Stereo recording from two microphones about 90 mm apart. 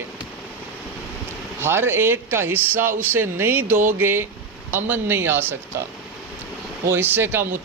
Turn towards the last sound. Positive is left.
turn(degrees=-25)  # may be behind; listen again after turning